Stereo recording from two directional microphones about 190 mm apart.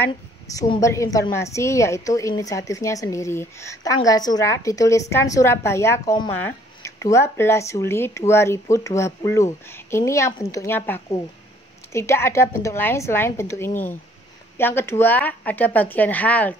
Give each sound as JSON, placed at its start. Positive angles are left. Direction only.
{"t": 0.6, "sound": "a woman's voice", "side_deg": 15}